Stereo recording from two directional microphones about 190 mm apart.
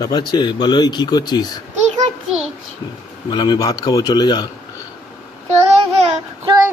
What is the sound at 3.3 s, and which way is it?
Speech, 20° left (ahead or behind).